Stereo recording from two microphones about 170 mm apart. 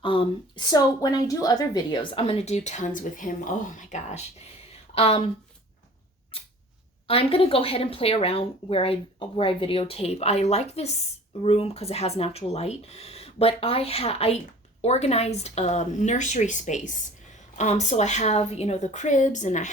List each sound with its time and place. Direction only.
0.0 s speech: 30° left (ahead or behind)
4.9 s speech: 35° left (ahead or behind)
6.3 s camera: 35° left (ahead or behind)
7.1 s speech: 35° left (ahead or behind)